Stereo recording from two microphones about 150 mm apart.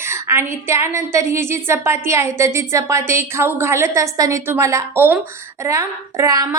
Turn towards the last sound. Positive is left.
turn(degrees=-20)  # may be behind; listen again after turning